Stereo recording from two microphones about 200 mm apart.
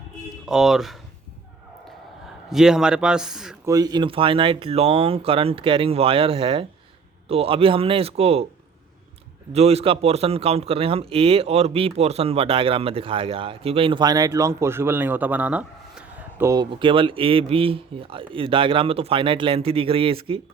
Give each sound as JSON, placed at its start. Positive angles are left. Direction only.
{"t": 0.4, "sound": "speech", "side_deg": 0}
{"t": 2.5, "sound": "speech", "side_deg": 0}
{"t": 3.7, "sound": "a man's voice", "side_deg": -20}
{"t": 9.5, "sound": "a man's voice", "side_deg": -30}